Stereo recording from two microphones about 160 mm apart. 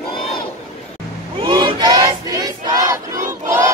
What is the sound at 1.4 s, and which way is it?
Battle cry, 30° right (ahead or behind).